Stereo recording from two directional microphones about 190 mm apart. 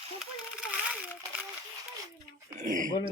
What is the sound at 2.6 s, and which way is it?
Speech, 45° right (ahead or behind).